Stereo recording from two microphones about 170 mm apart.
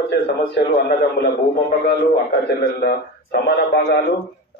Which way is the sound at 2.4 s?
70° left (ahead or behind).